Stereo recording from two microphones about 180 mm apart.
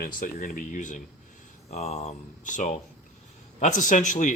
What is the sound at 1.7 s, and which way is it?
Speech, 35° left (ahead or behind).